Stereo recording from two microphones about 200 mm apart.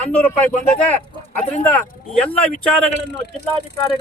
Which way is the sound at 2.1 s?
5° left (ahead or behind).